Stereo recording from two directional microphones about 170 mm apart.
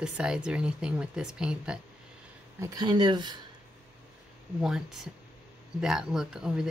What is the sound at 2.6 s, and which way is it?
Speech, 25° right (ahead or behind).